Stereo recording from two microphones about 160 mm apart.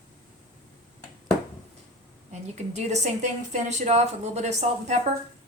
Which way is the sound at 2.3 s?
45° right (ahead or behind).